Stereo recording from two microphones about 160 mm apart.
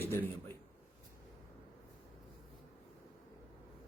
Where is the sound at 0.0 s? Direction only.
15° left (ahead or behind).